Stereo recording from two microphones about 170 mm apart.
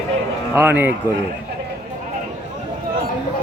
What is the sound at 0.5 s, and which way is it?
Speech, 10° right (ahead or behind).